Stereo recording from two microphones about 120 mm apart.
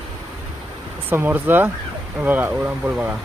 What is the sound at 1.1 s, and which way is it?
Speech, 15° right (ahead or behind).